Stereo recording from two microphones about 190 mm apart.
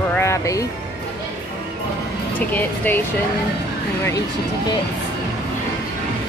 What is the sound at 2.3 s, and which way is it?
Speech, 10° left (ahead or behind).